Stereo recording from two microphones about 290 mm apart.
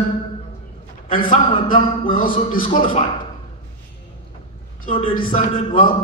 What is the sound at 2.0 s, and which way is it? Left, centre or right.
Speech, left.